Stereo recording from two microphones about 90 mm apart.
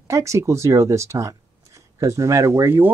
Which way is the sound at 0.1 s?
35° right (ahead or behind).